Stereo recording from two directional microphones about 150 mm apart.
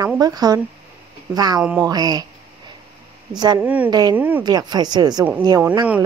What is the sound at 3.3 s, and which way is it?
Speech, 30° right (ahead or behind).